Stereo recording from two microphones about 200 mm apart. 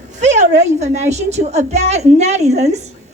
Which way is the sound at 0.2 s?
35° right (ahead or behind).